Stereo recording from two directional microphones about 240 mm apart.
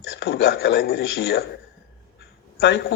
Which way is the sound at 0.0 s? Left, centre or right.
Left.